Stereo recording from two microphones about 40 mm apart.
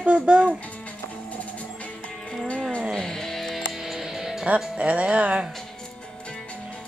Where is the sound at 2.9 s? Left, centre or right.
Centre.